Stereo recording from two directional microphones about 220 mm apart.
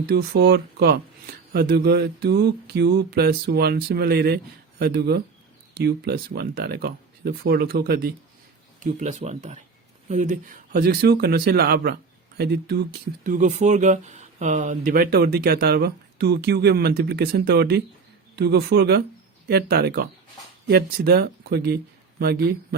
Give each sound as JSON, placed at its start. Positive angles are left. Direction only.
{"t": 0.1, "sound": "speech", "side_deg": -45}
{"t": 8.8, "sound": "speech", "side_deg": -35}